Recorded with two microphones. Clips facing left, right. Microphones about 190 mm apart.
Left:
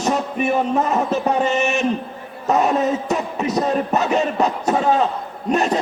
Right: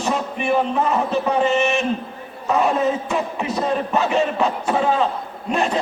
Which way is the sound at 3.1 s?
40° left (ahead or behind).